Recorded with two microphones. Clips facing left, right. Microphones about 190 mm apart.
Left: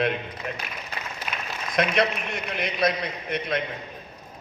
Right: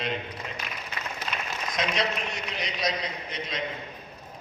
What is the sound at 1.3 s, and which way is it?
Applause, 15° left (ahead or behind).